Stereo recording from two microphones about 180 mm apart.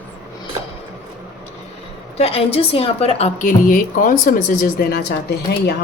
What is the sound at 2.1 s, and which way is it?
A woman's voice, 35° left (ahead or behind).